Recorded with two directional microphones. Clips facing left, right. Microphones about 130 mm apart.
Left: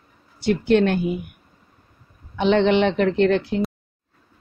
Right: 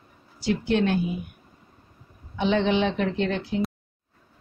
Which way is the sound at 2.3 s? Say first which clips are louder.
Left 5 dB; 65° left (ahead or behind).